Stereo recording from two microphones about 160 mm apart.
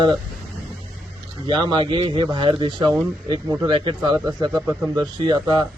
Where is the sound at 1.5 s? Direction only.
30° right (ahead or behind).